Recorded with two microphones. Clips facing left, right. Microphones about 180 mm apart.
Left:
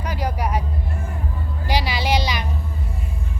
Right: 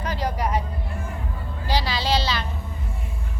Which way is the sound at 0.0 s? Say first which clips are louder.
Left 1 dB; 10° left (ahead or behind).